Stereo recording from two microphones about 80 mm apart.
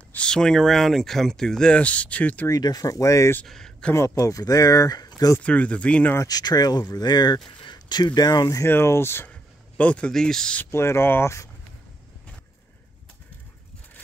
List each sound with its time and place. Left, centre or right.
0.1 s speech: centre
2.4 s speech: left
3.4 s a sound: centre
3.9 s speech: left
5.4 s speech: centre
6.2 s speech: left
8.6 s speech: left
9.3 s speech: centre
10.7 s speech: left